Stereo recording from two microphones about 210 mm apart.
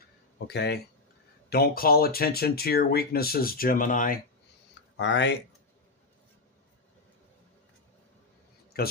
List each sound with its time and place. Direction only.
0.3 s speech: 50° left (ahead or behind)
4.9 s speech: 60° left (ahead or behind)
8.7 s speech: 45° left (ahead or behind)